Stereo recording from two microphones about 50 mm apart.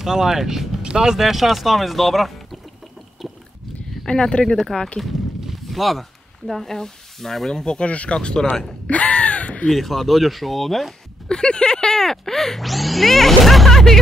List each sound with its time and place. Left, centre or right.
0.0 s speech: centre
4.0 s speech: centre
5.0 s speech: centre
8.8 s a sound: left
9.7 s speech: centre
11.2 s speech: centre